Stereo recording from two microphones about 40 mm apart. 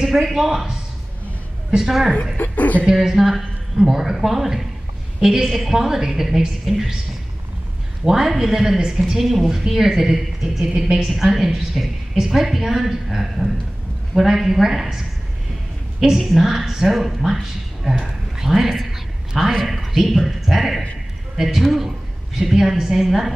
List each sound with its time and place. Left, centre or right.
0.0 s a woman's voice: centre
1.8 s a woman's voice: centre
2.3 s a woman's voice: left
2.9 s a woman's voice: centre
8.0 s a woman's voice: centre
9.2 s a woman's voice: centre
16.0 s a woman's voice: centre
18.9 s a sound: centre
19.6 s a woman's voice: centre